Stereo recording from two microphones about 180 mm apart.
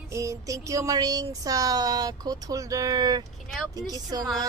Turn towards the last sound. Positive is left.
turn(degrees=-20)  # may be behind; listen again after turning